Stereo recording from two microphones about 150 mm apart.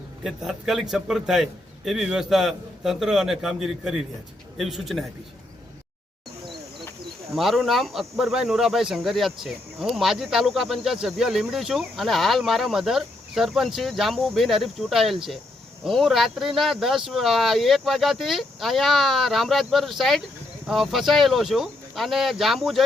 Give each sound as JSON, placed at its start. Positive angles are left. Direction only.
{"t": 0.2, "sound": "speech", "side_deg": -5}
{"t": 6.4, "sound": "a sound", "side_deg": 0}
{"t": 7.3, "sound": "speech", "side_deg": 0}